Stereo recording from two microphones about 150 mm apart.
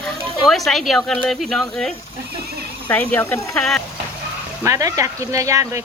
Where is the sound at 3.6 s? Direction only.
5° left (ahead or behind).